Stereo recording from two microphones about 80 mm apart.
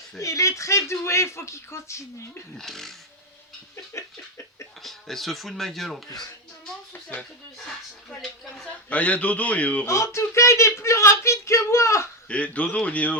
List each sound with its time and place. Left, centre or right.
0.2 s speech: left
2.6 s speech: centre
3.9 s speech: left
4.8 s speech: centre
6.9 s a sound: centre
8.6 s a man's voice: centre
9.8 s speech: left
12.3 s a man's voice: centre